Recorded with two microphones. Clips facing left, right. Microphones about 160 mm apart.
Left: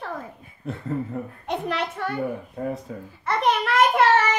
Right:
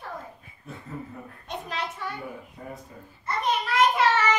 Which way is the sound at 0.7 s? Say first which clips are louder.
Left 10 dB; 70° left (ahead or behind).